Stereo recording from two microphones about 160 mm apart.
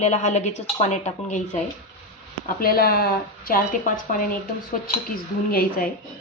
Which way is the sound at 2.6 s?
65° left (ahead or behind).